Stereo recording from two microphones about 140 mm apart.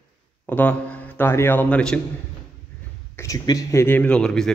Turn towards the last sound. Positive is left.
turn(degrees=5)  # may be behind; listen again after turning